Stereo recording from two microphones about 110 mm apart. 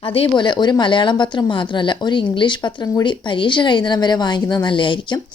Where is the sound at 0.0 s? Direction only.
55° left (ahead or behind).